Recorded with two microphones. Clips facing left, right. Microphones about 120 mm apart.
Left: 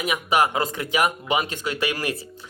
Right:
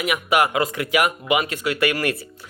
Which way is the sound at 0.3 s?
30° left (ahead or behind).